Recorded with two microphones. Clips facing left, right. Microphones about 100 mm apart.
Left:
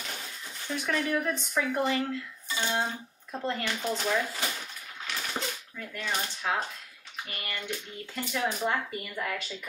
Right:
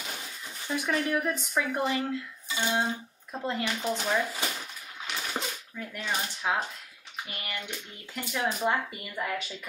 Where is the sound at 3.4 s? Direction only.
15° right (ahead or behind).